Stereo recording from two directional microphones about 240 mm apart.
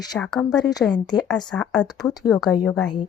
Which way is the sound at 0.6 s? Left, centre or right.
Centre.